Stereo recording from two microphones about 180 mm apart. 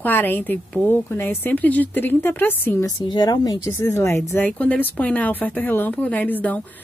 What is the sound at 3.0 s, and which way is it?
A woman's voice, 25° left (ahead or behind).